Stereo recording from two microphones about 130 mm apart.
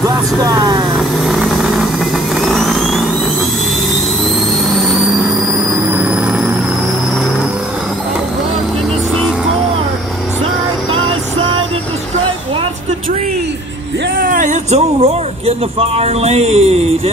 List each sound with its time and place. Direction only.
0.0 s vehicle: 30° right (ahead or behind)
0.9 s vehicle: centre (ahead or behind)
4.7 s vehicle: centre (ahead or behind)
14.2 s a sound: 80° right; by 17.1 s 50° right (ahead or behind)